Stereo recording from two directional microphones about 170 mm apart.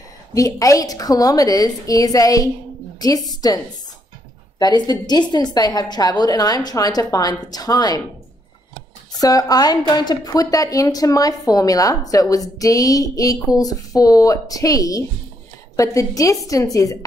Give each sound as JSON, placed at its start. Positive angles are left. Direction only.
{"t": 0.3, "sound": "speech", "side_deg": 20}
{"t": 4.6, "sound": "speech", "side_deg": 25}
{"t": 9.2, "sound": "speech", "side_deg": 20}